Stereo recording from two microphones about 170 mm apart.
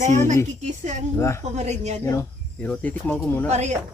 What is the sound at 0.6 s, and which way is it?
A woman's voice, 45° right (ahead or behind).